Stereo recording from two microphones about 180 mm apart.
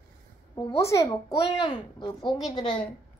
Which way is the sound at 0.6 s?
20° left (ahead or behind).